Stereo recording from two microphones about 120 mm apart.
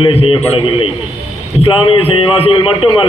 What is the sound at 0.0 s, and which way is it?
A man's voice, 50° left (ahead or behind).